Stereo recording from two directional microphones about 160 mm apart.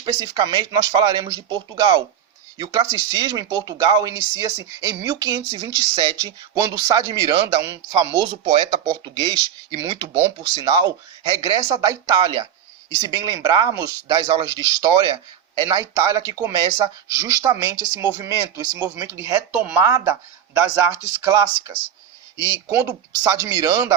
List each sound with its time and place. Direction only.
0.0 s speech: 25° right (ahead or behind)